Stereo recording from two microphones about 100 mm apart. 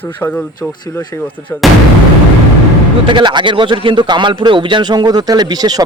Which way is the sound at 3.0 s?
50° right (ahead or behind).